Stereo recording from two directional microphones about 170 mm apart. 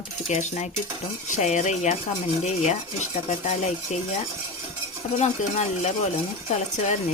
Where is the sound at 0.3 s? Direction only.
40° left (ahead or behind).